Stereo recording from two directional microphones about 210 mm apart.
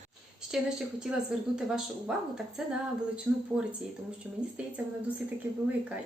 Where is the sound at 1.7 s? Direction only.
5° right (ahead or behind).